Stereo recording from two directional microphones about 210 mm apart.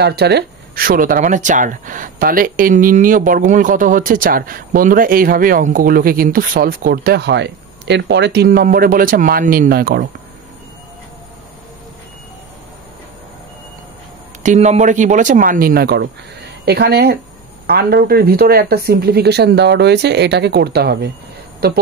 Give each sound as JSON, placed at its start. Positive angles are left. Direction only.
{"t": 0.0, "sound": "speech", "side_deg": -50}
{"t": 14.4, "sound": "speech", "side_deg": -35}